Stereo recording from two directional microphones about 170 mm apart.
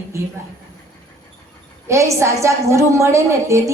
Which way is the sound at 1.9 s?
15° right (ahead or behind).